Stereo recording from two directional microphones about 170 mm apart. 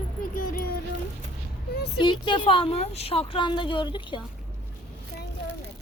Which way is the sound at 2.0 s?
30° left (ahead or behind).